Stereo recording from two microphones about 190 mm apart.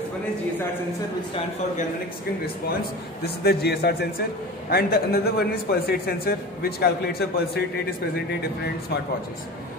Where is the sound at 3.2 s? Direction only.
55° left (ahead or behind).